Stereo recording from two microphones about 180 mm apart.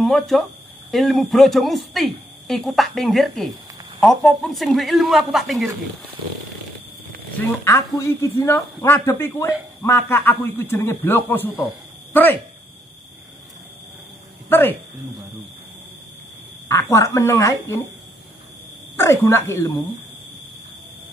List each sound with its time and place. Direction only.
0.0 s speech: centre (ahead or behind)
7.3 s speech: 15° left (ahead or behind)
14.5 s speech: 10° left (ahead or behind)
16.6 s a woman's voice: 15° left (ahead or behind)
18.9 s speech: 15° left (ahead or behind)